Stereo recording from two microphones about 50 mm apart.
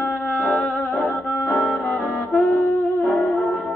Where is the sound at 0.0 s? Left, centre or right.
Left.